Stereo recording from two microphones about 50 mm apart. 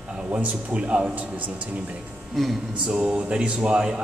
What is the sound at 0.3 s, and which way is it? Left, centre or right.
Speech, right.